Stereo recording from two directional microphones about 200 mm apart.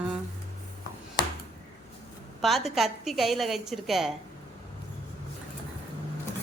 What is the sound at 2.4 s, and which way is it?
A woman's voice, centre (ahead or behind).